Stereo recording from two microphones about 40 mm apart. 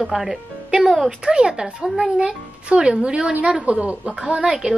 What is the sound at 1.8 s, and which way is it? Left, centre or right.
Speech, centre.